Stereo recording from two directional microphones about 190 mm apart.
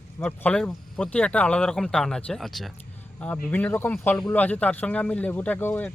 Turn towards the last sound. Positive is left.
turn(degrees=10)  # may be behind; listen again after turning